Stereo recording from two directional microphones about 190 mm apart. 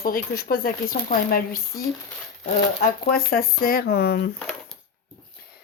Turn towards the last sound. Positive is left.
turn(degrees=55)  # may be behind; listen again after turning